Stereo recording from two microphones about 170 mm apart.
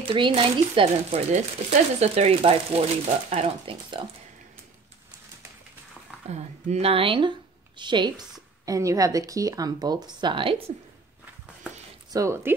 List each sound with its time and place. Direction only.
0.0 s speech: 30° right (ahead or behind)
6.2 s a woman's voice: 40° right (ahead or behind)
12.1 s speech: 15° right (ahead or behind)